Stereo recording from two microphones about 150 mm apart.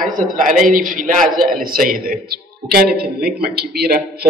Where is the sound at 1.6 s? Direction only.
70° right (ahead or behind); by 4.3 s 90° right.